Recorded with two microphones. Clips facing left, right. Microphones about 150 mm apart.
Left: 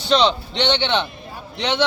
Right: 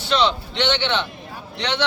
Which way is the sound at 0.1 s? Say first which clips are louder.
Left 3 dB; 20° left (ahead or behind).